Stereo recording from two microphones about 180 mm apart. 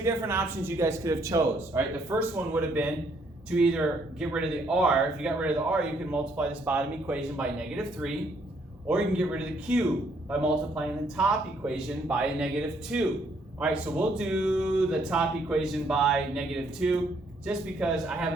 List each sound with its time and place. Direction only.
0.0 s speech: 15° right (ahead or behind)